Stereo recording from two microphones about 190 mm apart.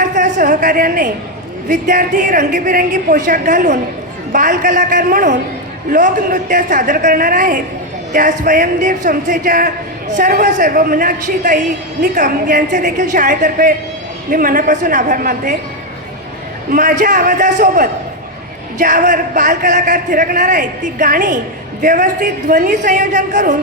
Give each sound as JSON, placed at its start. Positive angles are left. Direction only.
{"t": 0.0, "sound": "a woman's voice", "side_deg": -40}
{"t": 16.7, "sound": "speech", "side_deg": -40}